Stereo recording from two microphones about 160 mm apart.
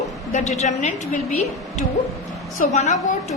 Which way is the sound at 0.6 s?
45° left (ahead or behind).